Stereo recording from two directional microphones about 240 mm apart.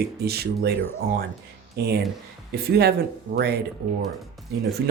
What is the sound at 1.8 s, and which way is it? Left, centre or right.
Speech, right.